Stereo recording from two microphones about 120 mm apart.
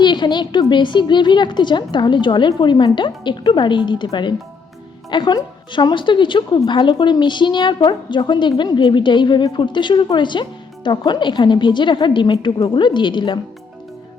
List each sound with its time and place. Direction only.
0.0 s speech: 40° left (ahead or behind)